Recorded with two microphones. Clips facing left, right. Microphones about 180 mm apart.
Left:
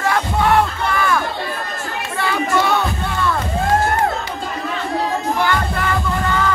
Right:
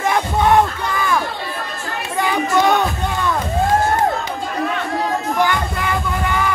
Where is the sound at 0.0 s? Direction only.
20° right (ahead or behind).